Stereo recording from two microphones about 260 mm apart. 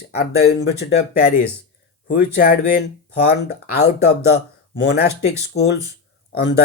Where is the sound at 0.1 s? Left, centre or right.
Left.